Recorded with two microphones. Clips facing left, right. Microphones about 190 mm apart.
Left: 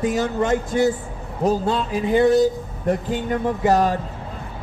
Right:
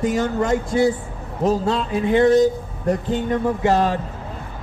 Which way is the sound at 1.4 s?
Centre (ahead or behind).